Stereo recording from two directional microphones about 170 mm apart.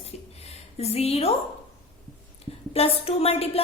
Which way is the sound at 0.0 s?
40° left (ahead or behind).